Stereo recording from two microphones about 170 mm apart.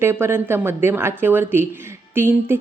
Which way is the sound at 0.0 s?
15° right (ahead or behind).